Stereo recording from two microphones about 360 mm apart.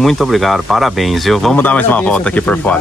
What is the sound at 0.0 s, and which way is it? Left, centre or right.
Speech, centre.